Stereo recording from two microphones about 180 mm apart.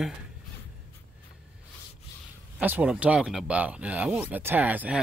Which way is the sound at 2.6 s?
10° right (ahead or behind).